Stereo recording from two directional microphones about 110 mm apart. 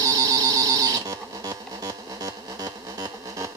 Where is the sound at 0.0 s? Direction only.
35° right (ahead or behind).